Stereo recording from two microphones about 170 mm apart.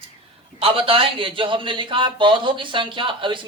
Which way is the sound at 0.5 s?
35° right (ahead or behind).